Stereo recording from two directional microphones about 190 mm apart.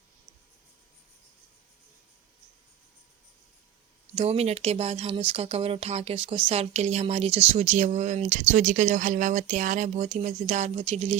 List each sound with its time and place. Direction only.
4.1 s speech: 35° right (ahead or behind)